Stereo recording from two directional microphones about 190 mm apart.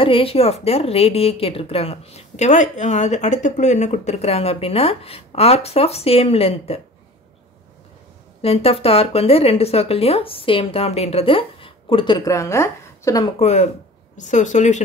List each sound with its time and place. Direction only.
0.0 s a woman's voice: 30° left (ahead or behind)
8.4 s a woman's voice: 30° left (ahead or behind)
13.4 s a woman's voice: 35° left (ahead or behind)